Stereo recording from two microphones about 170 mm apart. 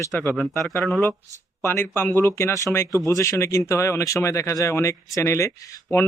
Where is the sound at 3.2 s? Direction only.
15° left (ahead or behind).